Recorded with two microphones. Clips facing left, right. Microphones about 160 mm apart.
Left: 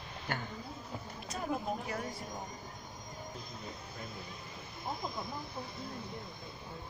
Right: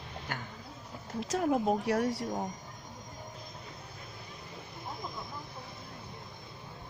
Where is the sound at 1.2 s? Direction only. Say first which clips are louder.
Right 9 dB; 80° right.